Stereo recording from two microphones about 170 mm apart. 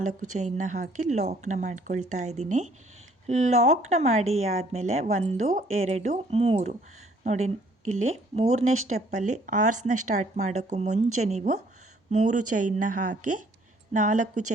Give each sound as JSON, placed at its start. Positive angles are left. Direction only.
{"t": 0.0, "sound": "speech", "side_deg": -45}